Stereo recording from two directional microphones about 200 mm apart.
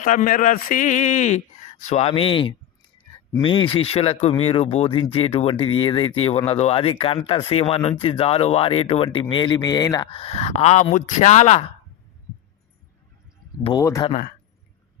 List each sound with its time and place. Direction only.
0.0 s speech: 40° left (ahead or behind)
13.7 s speech: 15° left (ahead or behind)
14.1 s speech: 45° left (ahead or behind)